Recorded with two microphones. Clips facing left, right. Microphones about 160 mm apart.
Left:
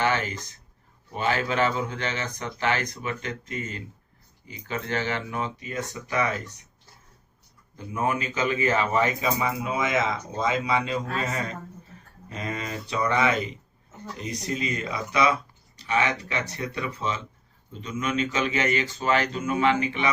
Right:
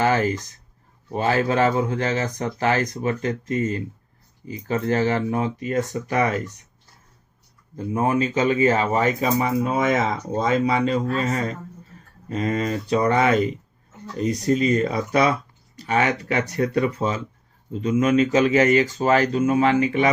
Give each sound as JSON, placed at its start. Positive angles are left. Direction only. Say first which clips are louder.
{"t": 0.0, "sound": "a sound", "louder": "right 6 dB", "side_deg": -40}
{"t": 1.1, "sound": "speech", "louder": "right 5 dB", "side_deg": -35}
{"t": 7.9, "sound": "speech", "louder": "right 6 dB", "side_deg": -35}